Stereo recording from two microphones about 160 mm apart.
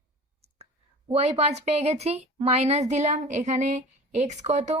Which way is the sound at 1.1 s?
40° right (ahead or behind).